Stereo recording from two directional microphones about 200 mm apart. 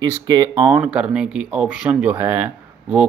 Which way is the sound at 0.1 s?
20° right (ahead or behind).